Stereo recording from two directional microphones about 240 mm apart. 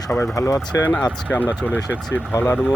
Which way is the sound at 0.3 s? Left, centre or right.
Centre.